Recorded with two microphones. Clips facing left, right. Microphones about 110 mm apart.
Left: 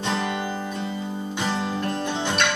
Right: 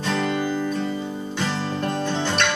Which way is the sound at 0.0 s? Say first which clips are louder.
Right 3 dB; 25° left (ahead or behind).